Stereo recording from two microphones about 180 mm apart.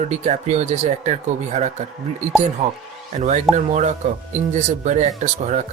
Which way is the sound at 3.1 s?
40° right (ahead or behind).